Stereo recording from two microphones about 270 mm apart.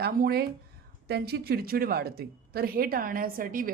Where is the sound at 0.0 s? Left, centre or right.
Right.